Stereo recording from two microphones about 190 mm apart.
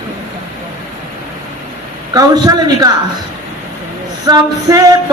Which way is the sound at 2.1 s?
20° right (ahead or behind).